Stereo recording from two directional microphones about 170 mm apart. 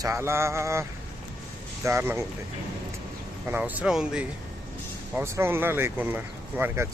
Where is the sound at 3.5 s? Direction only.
10° right (ahead or behind).